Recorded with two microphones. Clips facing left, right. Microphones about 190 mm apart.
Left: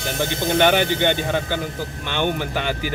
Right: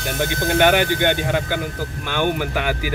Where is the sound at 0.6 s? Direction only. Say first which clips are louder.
Right 1 dB; 10° right (ahead or behind).